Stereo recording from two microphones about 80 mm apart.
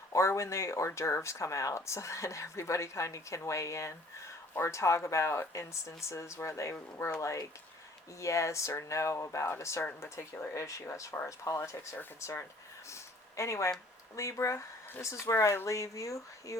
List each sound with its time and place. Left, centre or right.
0.1 s speech: left
12.9 s a sound: left
14.2 s speech: left